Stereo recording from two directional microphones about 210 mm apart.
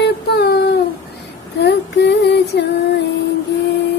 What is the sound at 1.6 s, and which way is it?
Music, 55° left (ahead or behind).